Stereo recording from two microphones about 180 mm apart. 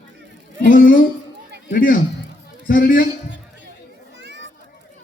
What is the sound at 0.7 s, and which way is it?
A man's voice, 50° left (ahead or behind).